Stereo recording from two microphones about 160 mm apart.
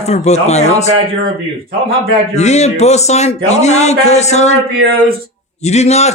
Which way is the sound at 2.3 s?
45° left (ahead or behind).